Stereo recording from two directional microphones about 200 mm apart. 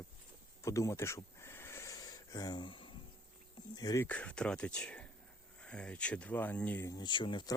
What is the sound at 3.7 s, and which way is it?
Speech, 20° left (ahead or behind).